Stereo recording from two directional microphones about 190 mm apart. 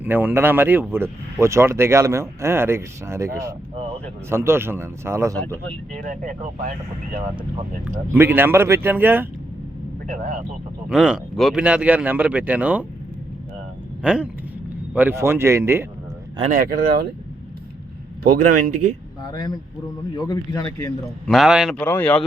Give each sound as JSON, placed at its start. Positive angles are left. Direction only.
{"t": 0.0, "sound": "speech", "side_deg": -10}
{"t": 6.0, "sound": "speech", "side_deg": -40}
{"t": 8.1, "sound": "speech", "side_deg": -10}
{"t": 10.1, "sound": "speech", "side_deg": -45}
{"t": 10.8, "sound": "speech", "side_deg": -5}
{"t": 14.0, "sound": "speech", "side_deg": -5}
{"t": 16.5, "sound": "speech", "side_deg": -50}
{"t": 18.2, "sound": "speech", "side_deg": -45}
{"t": 19.3, "sound": "speech", "side_deg": 20}
{"t": 21.0, "sound": "a man's voice", "side_deg": 0}